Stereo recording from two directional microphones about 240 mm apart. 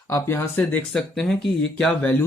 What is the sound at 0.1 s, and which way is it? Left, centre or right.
Speech, centre.